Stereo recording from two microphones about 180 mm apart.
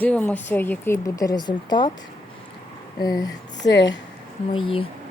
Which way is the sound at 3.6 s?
80° left.